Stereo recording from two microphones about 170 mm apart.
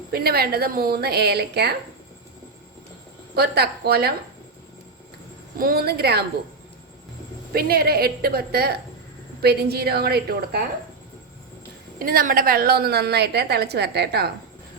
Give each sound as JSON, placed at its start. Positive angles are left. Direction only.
{"t": 0.1, "sound": "a woman's voice", "side_deg": -65}
{"t": 3.3, "sound": "a woman's voice", "side_deg": -70}
{"t": 5.5, "sound": "a woman's voice", "side_deg": -60}
{"t": 7.5, "sound": "a woman's voice", "side_deg": -65}
{"t": 11.9, "sound": "a woman's voice", "side_deg": -60}